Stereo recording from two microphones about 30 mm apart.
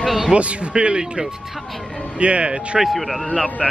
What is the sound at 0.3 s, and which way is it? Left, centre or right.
Speech, right.